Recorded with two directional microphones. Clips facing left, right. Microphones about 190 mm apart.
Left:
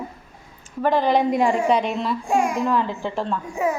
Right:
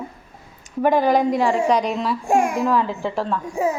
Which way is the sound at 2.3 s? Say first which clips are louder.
Right 3 dB; 45° right (ahead or behind).